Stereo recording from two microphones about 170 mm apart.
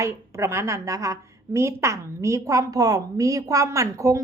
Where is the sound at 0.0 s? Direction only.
15° right (ahead or behind).